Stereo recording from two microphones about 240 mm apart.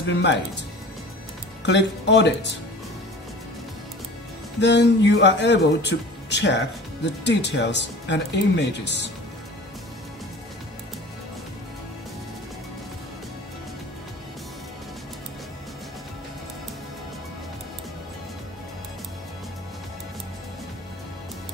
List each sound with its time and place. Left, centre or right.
0.2 s speech: left
1.6 s speech: left
4.6 s speech: left